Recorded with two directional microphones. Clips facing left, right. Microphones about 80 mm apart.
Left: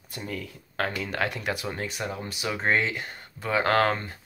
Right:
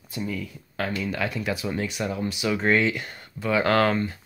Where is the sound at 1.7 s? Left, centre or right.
Left.